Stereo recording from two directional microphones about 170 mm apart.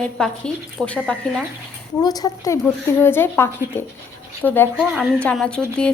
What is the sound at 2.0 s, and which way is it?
A woman's voice, 20° left (ahead or behind).